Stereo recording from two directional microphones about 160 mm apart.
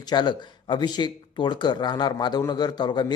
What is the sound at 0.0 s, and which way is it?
Speech, 25° left (ahead or behind).